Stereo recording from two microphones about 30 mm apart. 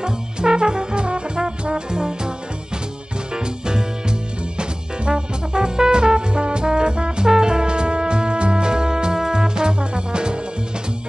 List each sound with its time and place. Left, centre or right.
0.0 s brass instrument: right
3.3 s music: right